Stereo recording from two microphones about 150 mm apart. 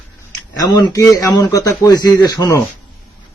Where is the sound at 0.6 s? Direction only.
25° left (ahead or behind).